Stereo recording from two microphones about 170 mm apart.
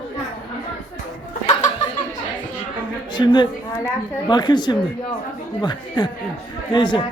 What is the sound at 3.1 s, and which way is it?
Speech, 25° left (ahead or behind).